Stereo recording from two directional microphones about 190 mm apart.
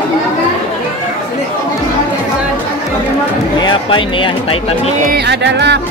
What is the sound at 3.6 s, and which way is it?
Music, 25° left (ahead or behind).